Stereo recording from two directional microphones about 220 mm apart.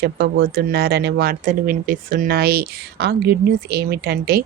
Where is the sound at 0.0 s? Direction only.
45° right (ahead or behind).